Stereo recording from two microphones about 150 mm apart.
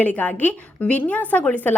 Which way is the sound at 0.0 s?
10° left (ahead or behind).